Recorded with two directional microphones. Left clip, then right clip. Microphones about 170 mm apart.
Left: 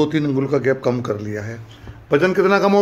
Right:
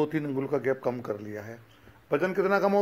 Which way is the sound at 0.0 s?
15° right (ahead or behind).